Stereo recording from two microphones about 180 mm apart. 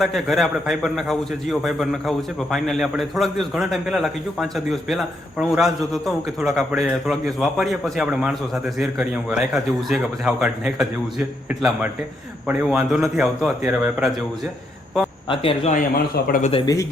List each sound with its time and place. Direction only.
0.0 s a man's voice: centre (ahead or behind)
15.3 s speech: 30° left (ahead or behind)